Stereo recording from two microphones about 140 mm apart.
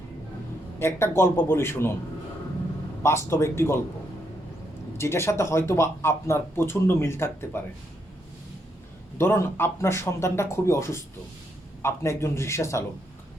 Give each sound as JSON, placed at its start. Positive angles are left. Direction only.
{"t": 0.8, "sound": "speech", "side_deg": 15}
{"t": 3.0, "sound": "speech", "side_deg": 20}
{"t": 4.9, "sound": "speech", "side_deg": 20}
{"t": 9.1, "sound": "speech", "side_deg": 15}